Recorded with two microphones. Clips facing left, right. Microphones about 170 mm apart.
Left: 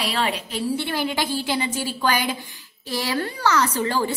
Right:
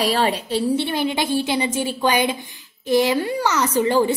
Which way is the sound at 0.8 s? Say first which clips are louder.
Right 3 dB; 20° right (ahead or behind).